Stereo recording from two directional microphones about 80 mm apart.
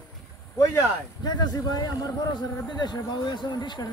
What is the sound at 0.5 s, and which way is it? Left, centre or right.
A man's voice, left.